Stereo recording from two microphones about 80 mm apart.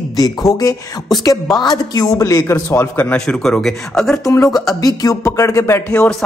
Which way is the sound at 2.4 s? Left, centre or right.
Left.